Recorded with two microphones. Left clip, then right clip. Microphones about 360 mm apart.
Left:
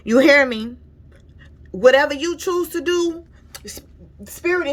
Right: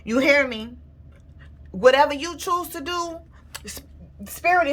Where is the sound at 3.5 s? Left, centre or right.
Centre.